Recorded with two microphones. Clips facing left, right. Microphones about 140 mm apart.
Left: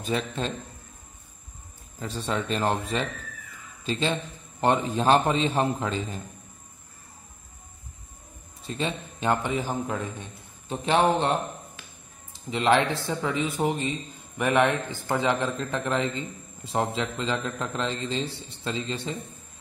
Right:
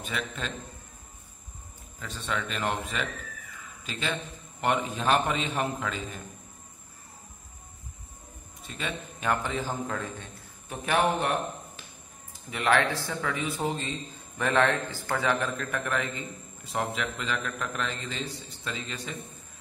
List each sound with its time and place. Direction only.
0.0 s speech: 35° left (ahead or behind)
2.0 s a man's voice: 35° left (ahead or behind)
8.6 s a man's voice: 30° left (ahead or behind)